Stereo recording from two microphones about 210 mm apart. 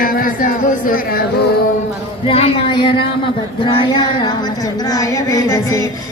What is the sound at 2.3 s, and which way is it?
Speech, 25° left (ahead or behind).